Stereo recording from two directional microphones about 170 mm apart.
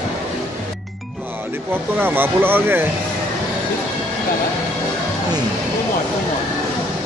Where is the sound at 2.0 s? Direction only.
10° right (ahead or behind).